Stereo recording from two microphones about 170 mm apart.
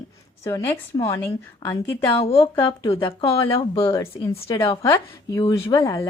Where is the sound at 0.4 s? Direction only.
15° left (ahead or behind).